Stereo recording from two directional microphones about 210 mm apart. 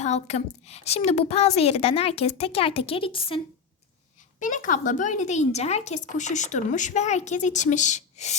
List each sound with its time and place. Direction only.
0.0 s a woman's voice: 30° left (ahead or behind)
4.4 s speech: 40° left (ahead or behind)